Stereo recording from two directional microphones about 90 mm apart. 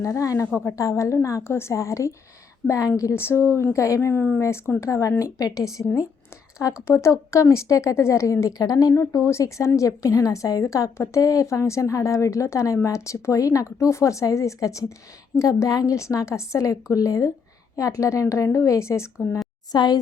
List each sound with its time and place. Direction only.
0.0 s a woman's voice: 35° left (ahead or behind)
6.8 s a woman's voice: 30° left (ahead or behind)
19.7 s speech: 55° left (ahead or behind)